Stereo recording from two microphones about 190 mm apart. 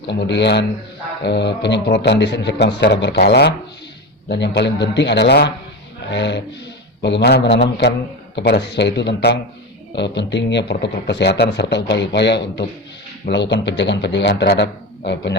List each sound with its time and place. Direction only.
0.1 s a man's voice: 65° left (ahead or behind)